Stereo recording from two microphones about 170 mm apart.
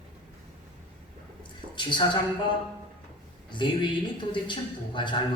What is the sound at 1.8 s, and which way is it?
A woman's voice, 25° left (ahead or behind).